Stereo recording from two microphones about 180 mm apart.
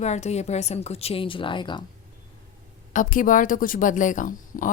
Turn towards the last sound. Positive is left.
turn(degrees=45)  # may be behind; listen again after turning